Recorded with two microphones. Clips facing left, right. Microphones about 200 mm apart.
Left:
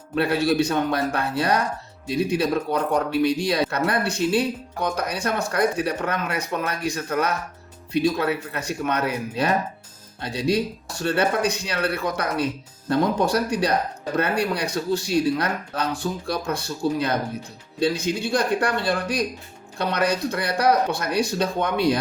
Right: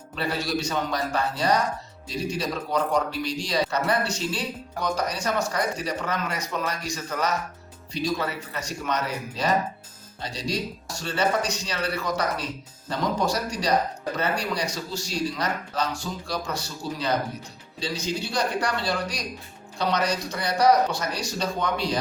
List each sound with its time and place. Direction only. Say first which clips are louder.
0.2 s speech: left 7 dB; 60° left (ahead or behind)